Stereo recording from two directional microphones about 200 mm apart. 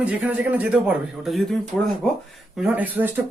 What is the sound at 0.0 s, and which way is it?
Speech, 5° right (ahead or behind).